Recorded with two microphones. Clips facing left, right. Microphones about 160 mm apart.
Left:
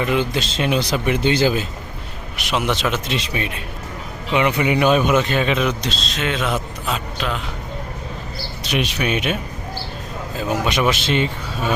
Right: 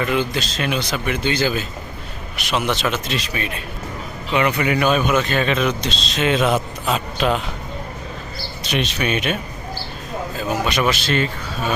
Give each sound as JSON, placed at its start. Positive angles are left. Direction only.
{"t": 0.0, "sound": "speech", "side_deg": 20}
{"t": 2.3, "sound": "speech", "side_deg": 15}
{"t": 6.4, "sound": "a man's voice", "side_deg": -30}
{"t": 8.7, "sound": "speech", "side_deg": 10}
{"t": 10.5, "sound": "speech", "side_deg": 20}